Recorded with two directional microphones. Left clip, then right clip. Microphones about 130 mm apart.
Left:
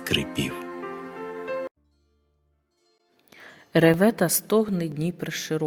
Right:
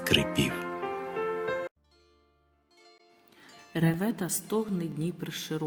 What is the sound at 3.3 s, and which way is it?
A woman's voice, 90° left.